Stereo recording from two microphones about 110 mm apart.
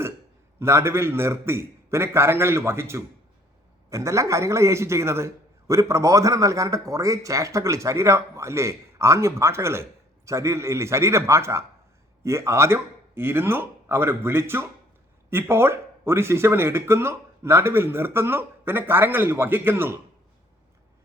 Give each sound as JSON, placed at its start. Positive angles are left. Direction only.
{"t": 0.6, "sound": "a man's voice", "side_deg": -25}